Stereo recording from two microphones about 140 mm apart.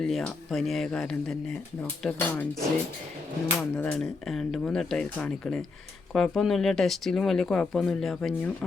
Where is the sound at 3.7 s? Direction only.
5° left (ahead or behind).